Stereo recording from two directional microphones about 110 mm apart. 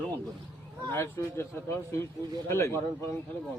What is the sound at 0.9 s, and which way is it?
A man's voice, 20° left (ahead or behind).